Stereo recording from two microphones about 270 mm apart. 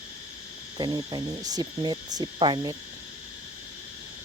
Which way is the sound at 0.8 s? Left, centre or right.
Centre.